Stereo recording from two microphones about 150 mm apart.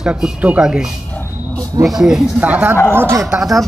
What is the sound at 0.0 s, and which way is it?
Speech, 5° right (ahead or behind).